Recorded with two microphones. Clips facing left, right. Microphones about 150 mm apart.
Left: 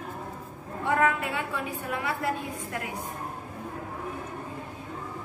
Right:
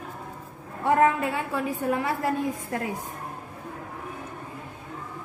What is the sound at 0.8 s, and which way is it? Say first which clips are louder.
A woman's voice: right 4 dB; 30° right (ahead or behind).